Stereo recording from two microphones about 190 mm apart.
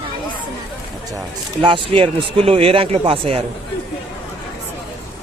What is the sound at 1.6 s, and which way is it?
Speech, 25° right (ahead or behind).